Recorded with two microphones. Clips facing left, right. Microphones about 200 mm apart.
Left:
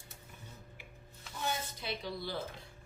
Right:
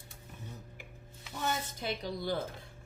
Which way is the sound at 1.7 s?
45° right (ahead or behind).